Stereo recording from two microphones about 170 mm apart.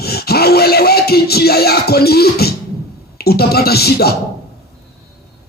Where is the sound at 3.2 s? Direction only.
65° left (ahead or behind).